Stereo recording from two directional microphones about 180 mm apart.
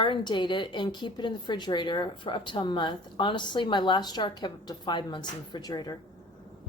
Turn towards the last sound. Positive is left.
turn(degrees=20)  # may be behind; listen again after turning